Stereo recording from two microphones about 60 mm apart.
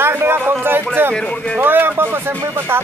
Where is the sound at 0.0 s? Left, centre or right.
Right.